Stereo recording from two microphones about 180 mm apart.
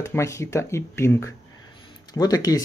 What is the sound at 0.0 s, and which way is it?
Speech, 15° left (ahead or behind).